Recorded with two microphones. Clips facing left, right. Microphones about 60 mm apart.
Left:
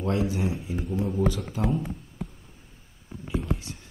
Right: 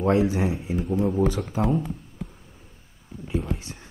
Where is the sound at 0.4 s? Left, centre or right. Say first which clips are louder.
Right 4 dB; right.